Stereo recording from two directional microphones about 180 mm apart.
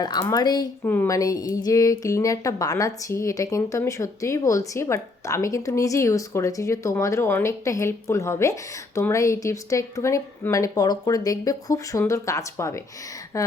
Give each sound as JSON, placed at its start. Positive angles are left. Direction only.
{"t": 0.0, "sound": "a woman's voice", "side_deg": 20}